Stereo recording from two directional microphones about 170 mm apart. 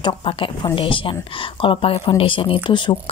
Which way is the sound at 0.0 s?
30° left (ahead or behind).